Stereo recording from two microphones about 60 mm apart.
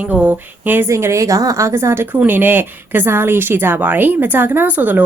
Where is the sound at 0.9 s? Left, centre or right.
Right.